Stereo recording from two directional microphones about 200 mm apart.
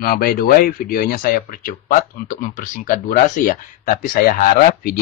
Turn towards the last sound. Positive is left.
turn(degrees=45)  # may be behind; listen again after turning